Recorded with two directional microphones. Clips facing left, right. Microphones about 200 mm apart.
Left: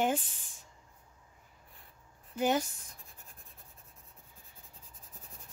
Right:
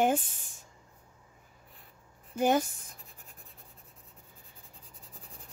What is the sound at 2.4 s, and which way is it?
Speech, 50° right (ahead or behind).